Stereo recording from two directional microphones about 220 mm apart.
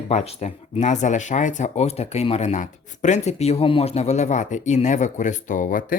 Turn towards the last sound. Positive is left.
turn(degrees=40)  # may be behind; listen again after turning